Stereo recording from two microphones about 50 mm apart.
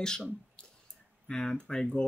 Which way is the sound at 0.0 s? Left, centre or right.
Centre.